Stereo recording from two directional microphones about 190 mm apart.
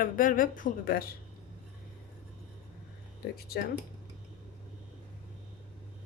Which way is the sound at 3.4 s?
55° left (ahead or behind).